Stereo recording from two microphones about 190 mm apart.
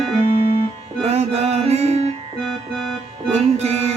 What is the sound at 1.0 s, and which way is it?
Music, 35° right (ahead or behind).